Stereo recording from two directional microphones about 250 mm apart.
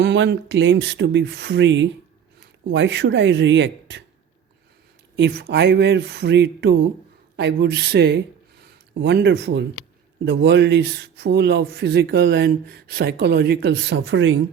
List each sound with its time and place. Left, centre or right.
0.0 s speech: right
5.1 s speech: right